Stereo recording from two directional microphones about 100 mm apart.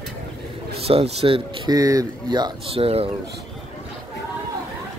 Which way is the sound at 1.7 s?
35° right (ahead or behind).